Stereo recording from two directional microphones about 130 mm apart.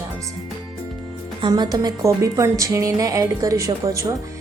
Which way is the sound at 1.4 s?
35° right (ahead or behind).